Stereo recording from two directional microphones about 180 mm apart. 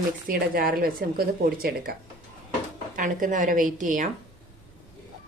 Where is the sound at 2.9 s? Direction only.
50° right (ahead or behind).